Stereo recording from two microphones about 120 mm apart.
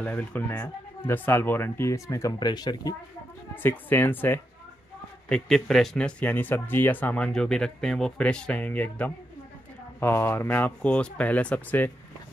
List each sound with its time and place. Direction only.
0.0 s speech: 15° left (ahead or behind); by 3.0 s 35° left (ahead or behind)
3.5 s speech: 15° left (ahead or behind)
5.3 s speech: 5° left (ahead or behind)